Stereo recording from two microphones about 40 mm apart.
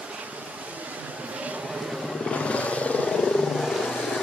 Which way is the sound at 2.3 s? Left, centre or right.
Left.